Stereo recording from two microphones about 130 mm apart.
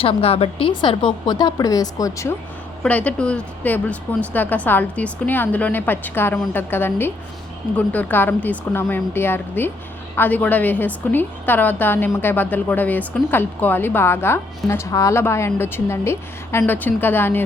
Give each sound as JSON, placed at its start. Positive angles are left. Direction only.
{"t": 0.0, "sound": "a woman's voice", "side_deg": 45}
{"t": 2.8, "sound": "a woman's voice", "side_deg": 10}